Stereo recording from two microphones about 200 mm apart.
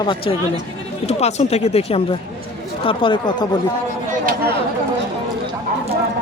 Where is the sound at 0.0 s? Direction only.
25° left (ahead or behind).